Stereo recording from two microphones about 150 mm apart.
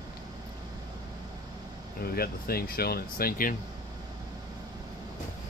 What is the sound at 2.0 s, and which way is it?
Speech, 90° left.